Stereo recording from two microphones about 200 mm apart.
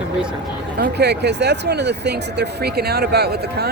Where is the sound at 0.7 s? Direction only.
55° right (ahead or behind).